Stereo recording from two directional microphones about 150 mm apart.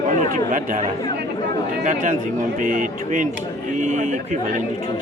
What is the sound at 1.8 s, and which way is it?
Speech, 55° right (ahead or behind).